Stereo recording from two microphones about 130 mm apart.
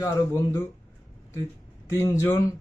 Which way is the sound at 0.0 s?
25° left (ahead or behind).